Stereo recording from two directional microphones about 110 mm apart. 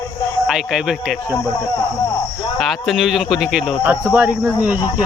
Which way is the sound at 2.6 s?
Centre (ahead or behind).